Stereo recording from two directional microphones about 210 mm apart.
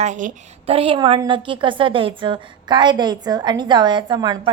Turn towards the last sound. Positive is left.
turn(degrees=-20)  # may be behind; listen again after turning